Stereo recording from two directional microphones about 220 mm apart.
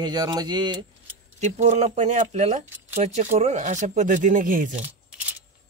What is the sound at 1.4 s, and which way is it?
Speech, 30° right (ahead or behind).